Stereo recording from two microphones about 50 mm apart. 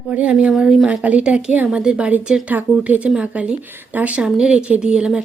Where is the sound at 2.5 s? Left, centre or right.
Right.